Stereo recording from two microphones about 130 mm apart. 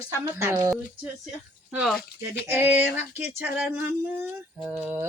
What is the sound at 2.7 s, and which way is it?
Speech, 15° right (ahead or behind).